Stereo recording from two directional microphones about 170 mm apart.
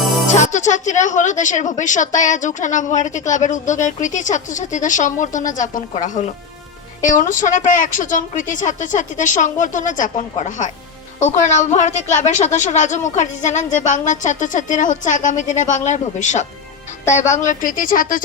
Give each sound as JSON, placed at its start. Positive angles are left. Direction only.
{"t": 0.3, "sound": "a woman's voice", "side_deg": 45}